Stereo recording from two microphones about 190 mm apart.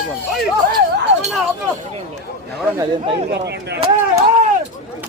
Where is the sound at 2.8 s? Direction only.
25° right (ahead or behind).